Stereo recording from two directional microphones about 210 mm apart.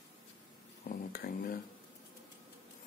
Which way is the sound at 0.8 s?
45° left (ahead or behind).